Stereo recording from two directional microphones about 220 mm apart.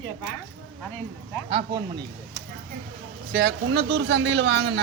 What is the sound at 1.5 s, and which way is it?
Speech, 20° right (ahead or behind).